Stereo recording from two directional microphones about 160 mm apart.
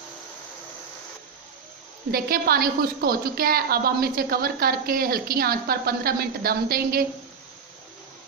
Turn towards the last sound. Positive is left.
turn(degrees=-65)  # may be behind; listen again after turning